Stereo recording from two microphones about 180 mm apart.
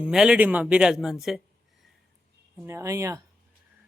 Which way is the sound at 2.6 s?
15° right (ahead or behind).